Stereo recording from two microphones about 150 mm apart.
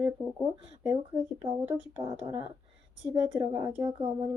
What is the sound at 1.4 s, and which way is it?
Speech, 15° right (ahead or behind).